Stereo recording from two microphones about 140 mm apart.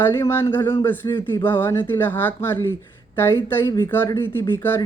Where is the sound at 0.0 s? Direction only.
20° left (ahead or behind).